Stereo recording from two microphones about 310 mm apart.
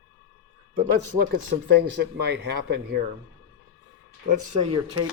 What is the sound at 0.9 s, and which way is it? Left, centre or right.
Speech, right.